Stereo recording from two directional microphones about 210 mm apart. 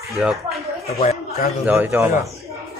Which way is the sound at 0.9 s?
30° left (ahead or behind).